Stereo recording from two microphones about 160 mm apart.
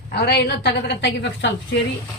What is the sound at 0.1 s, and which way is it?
A woman's voice, 90° left.